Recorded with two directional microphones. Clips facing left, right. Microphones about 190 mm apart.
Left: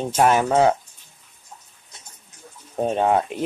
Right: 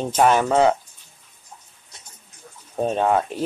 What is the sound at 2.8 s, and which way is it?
Speech, 15° left (ahead or behind).